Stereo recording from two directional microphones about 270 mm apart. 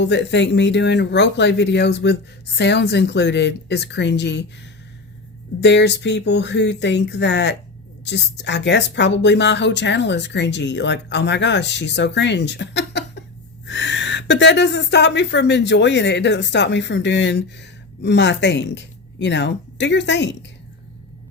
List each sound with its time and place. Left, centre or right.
0.0 s a woman's voice: left
5.5 s a woman's voice: left